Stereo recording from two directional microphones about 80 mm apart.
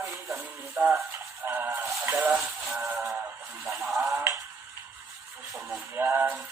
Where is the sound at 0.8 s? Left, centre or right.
Right.